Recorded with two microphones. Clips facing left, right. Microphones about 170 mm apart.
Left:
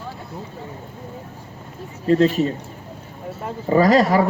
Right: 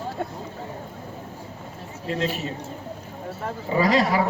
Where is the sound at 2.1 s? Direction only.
40° left (ahead or behind).